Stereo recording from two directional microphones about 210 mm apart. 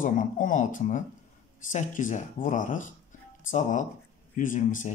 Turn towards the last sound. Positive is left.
turn(degrees=40)  # may be behind; listen again after turning